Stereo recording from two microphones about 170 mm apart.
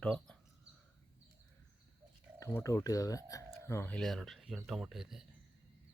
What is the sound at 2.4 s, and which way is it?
Speech, 20° left (ahead or behind).